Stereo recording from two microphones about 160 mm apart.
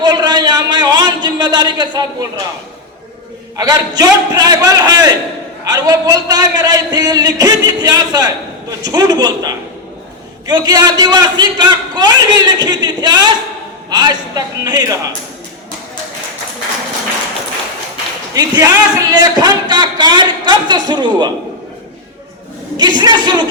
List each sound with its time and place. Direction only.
0.0 s a sound: 25° right (ahead or behind)
3.6 s speech: 25° right (ahead or behind)
18.3 s speech: 25° right (ahead or behind)
22.8 s speech: 30° right (ahead or behind)